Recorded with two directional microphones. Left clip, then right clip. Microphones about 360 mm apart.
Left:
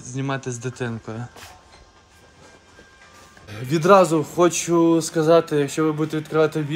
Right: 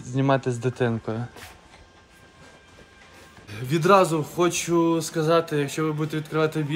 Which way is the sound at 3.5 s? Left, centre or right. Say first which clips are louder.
Left 3 dB; centre.